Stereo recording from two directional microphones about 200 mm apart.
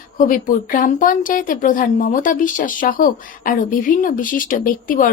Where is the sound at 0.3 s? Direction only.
45° left (ahead or behind).